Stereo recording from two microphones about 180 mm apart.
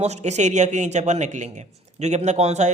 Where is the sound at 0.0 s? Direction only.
40° right (ahead or behind).